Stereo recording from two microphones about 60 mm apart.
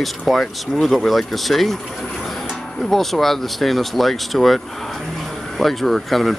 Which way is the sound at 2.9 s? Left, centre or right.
Centre.